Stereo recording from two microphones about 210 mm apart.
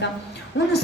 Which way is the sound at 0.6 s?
60° left (ahead or behind).